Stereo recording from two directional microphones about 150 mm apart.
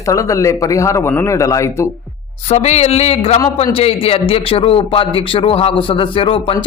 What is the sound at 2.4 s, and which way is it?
A man's voice, 45° left (ahead or behind).